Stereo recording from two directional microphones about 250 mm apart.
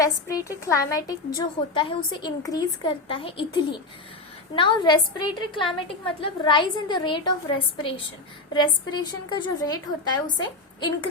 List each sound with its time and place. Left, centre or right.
0.0 s a woman's voice: centre